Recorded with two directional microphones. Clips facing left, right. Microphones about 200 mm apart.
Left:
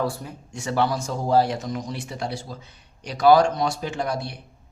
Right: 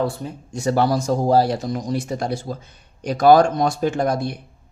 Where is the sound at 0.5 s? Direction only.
40° right (ahead or behind).